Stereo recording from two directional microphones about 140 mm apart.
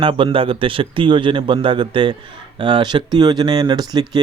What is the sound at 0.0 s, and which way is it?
Speech, 40° right (ahead or behind).